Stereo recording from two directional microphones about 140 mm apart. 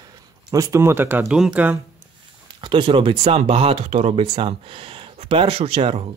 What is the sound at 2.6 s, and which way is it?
Speech, 35° right (ahead or behind).